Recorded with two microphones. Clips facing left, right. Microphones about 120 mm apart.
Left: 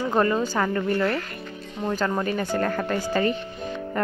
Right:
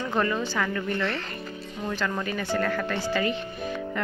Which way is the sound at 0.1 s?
35° left (ahead or behind).